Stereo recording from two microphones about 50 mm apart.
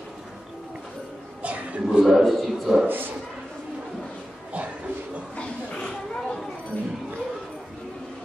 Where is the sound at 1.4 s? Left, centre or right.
Right.